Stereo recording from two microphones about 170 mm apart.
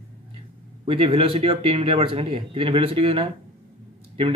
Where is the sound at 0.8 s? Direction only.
30° right (ahead or behind).